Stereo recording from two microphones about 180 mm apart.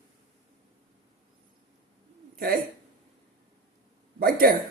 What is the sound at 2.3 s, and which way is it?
Speech, 55° right (ahead or behind).